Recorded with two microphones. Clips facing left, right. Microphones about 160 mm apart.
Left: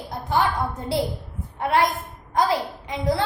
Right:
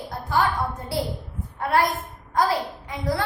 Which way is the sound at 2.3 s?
20° left (ahead or behind).